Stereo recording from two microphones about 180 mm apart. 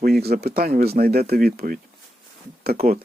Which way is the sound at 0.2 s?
60° right (ahead or behind).